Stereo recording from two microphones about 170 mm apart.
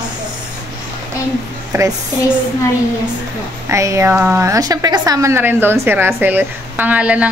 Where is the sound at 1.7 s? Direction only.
15° right (ahead or behind).